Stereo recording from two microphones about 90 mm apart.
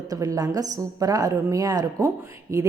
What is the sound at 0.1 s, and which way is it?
A woman's voice, 45° right (ahead or behind).